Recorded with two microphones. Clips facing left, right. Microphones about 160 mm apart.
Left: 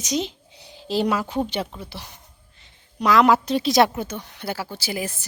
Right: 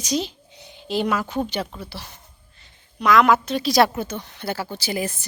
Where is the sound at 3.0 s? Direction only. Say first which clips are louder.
Even; 30° left (ahead or behind).